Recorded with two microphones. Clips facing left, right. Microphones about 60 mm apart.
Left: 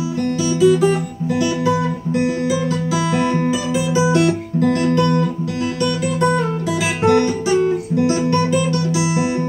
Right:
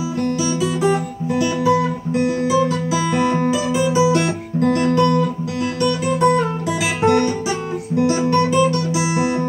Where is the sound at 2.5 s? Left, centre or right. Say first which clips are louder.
Right 3 dB; right.